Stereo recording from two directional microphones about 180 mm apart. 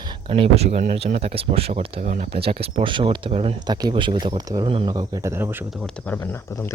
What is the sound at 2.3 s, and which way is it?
Speech, 30° right (ahead or behind).